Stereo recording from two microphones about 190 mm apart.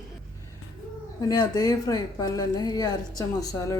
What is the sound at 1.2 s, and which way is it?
A woman's voice, 20° left (ahead or behind).